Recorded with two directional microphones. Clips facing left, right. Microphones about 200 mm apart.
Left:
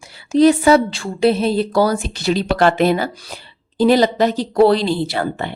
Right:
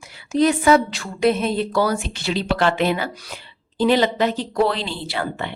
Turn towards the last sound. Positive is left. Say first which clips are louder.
# left 5 dB
turn(degrees=40)  # may be behind; listen again after turning